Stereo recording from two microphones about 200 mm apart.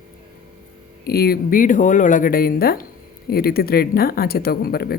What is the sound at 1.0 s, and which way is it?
Speech, 50° left (ahead or behind).